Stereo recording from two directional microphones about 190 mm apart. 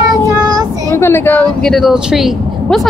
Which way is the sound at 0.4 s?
20° right (ahead or behind).